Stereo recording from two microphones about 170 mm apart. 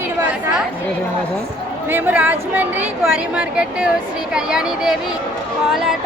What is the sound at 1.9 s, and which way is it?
A woman's voice, 10° right (ahead or behind).